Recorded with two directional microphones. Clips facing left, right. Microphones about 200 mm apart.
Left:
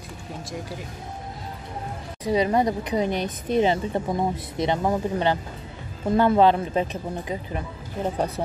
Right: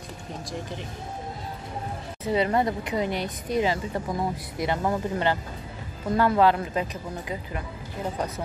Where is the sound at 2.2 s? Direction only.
15° left (ahead or behind).